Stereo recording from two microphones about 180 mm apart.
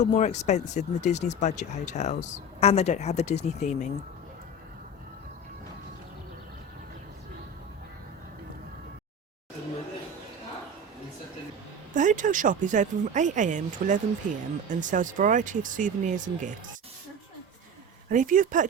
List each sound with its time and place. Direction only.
0.0 s speech: 40° left (ahead or behind)
11.9 s speech: 45° right (ahead or behind)
18.1 s speech: 45° right (ahead or behind)